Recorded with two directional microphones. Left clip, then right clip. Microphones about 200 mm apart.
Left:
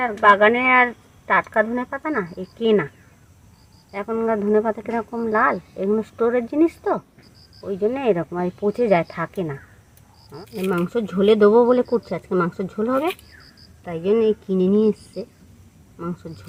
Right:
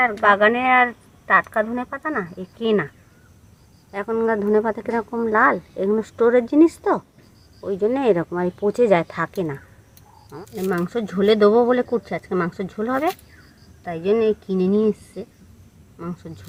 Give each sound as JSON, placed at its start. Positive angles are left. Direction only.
{"t": 0.0, "sound": "speech", "side_deg": 20}
{"t": 3.9, "sound": "speech", "side_deg": -10}
{"t": 10.6, "sound": "speech", "side_deg": 15}